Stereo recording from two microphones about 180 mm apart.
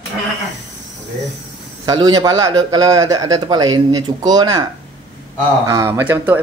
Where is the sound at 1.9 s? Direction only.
20° right (ahead or behind).